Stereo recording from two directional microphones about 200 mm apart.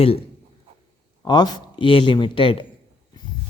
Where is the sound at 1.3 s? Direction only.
20° left (ahead or behind).